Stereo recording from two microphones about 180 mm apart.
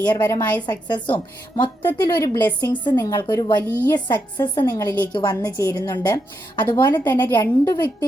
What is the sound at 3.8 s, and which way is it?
A woman's voice, 10° left (ahead or behind).